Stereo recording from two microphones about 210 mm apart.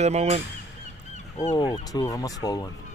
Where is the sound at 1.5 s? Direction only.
15° left (ahead or behind).